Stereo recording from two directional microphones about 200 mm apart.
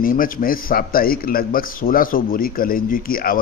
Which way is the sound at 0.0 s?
45° left (ahead or behind).